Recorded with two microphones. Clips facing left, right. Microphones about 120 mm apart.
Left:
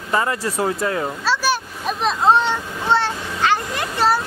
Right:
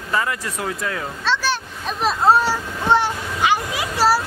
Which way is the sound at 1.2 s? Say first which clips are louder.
Even; 10° left (ahead or behind).